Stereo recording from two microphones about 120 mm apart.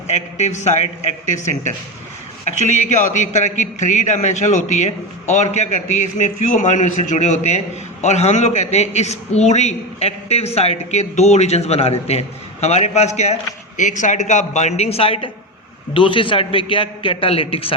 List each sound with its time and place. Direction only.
0.1 s a man's voice: 75° left (ahead or behind)
2.6 s a man's voice: 75° left (ahead or behind)
8.0 s a man's voice: 65° left (ahead or behind)